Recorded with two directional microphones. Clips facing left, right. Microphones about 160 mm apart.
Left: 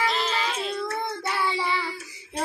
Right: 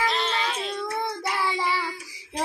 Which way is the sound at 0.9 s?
10° right (ahead or behind).